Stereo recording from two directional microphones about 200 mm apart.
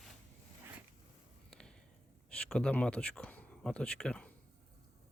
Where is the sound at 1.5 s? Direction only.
5° left (ahead or behind).